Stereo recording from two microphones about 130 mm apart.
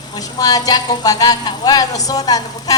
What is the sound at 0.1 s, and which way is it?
Speech, 30° left (ahead or behind).